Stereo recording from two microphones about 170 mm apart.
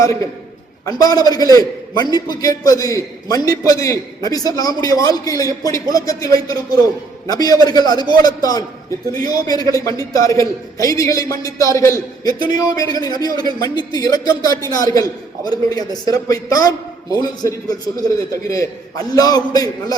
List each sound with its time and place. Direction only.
0.9 s a man's voice: 20° left (ahead or behind)
18.3 s a man's voice: 20° left (ahead or behind)